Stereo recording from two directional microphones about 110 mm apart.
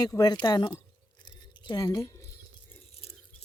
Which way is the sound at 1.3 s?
40° left (ahead or behind).